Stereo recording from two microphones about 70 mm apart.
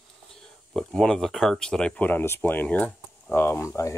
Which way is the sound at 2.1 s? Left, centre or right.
Left.